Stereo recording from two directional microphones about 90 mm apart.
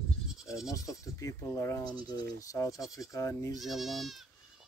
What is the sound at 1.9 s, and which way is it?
Speech, 50° left (ahead or behind).